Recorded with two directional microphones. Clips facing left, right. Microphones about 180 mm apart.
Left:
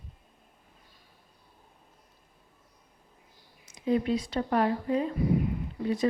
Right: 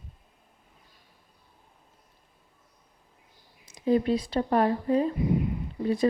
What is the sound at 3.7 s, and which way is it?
Speech, 35° right (ahead or behind).